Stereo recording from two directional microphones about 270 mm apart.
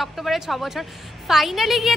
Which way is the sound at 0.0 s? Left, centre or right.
Centre.